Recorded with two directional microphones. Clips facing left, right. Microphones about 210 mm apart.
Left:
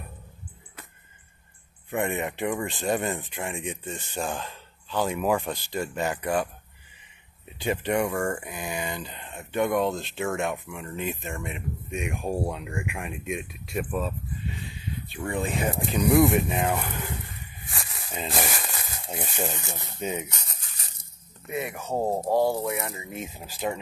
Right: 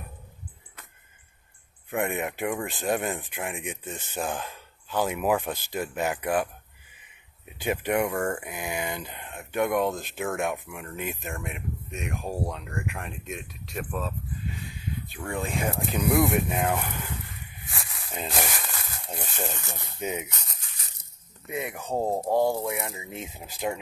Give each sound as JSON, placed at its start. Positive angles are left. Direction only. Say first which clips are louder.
{"t": 1.9, "sound": "speech", "louder": "left 1 dB", "side_deg": 0}
{"t": 3.3, "sound": "speech", "louder": "left 1 dB", "side_deg": -15}
{"t": 9.4, "sound": "speech", "louder": "left 1 dB", "side_deg": 0}
{"t": 11.9, "sound": "speech", "louder": "left 4 dB", "side_deg": 10}
{"t": 17.7, "sound": "a sound", "louder": "left 1 dB", "side_deg": 0}
{"t": 18.4, "sound": "speech", "louder": "left 1 dB", "side_deg": 15}
{"t": 20.0, "sound": "speech", "louder": "left 1 dB", "side_deg": -10}
{"t": 21.5, "sound": "speech", "louder": "left 1 dB", "side_deg": -15}